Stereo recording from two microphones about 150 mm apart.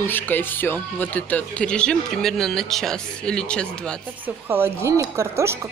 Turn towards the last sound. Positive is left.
turn(degrees=-20)  # may be behind; listen again after turning